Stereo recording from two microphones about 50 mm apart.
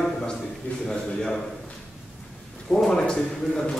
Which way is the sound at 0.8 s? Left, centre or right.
Centre.